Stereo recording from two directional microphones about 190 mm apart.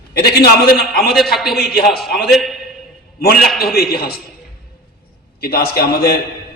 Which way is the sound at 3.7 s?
55° left (ahead or behind).